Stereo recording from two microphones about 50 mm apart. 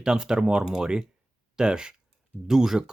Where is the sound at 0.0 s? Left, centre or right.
Centre.